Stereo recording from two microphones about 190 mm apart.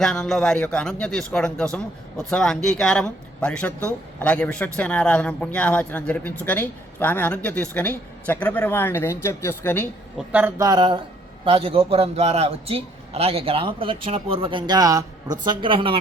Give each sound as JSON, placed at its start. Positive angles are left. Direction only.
{"t": 0.0, "sound": "speech", "side_deg": 0}
{"t": 10.2, "sound": "a man's voice", "side_deg": -10}